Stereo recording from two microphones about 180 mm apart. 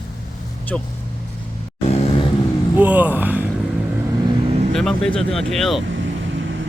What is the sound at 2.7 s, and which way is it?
Speech, 10° right (ahead or behind).